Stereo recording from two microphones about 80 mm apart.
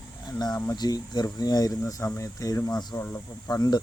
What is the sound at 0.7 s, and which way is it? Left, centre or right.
Speech, left.